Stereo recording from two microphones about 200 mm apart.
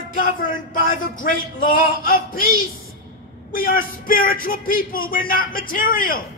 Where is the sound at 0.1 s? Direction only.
40° left (ahead or behind).